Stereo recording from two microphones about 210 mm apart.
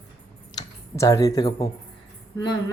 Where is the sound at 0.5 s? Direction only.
15° left (ahead or behind).